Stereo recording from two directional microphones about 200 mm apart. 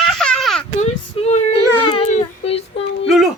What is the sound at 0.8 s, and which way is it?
Baby cry, 35° left (ahead or behind).